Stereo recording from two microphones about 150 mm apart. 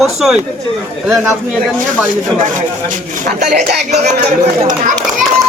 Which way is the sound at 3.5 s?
50° right (ahead or behind).